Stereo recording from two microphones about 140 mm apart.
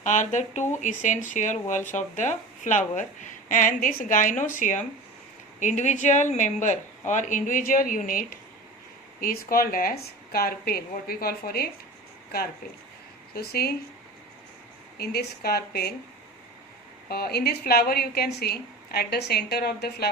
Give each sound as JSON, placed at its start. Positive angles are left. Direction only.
{"t": 0.0, "sound": "a woman's voice", "side_deg": 65}
{"t": 13.3, "sound": "a woman's voice", "side_deg": 90}
{"t": 14.9, "sound": "a woman's voice", "side_deg": 90}
{"t": 17.1, "sound": "a woman's voice", "side_deg": 90}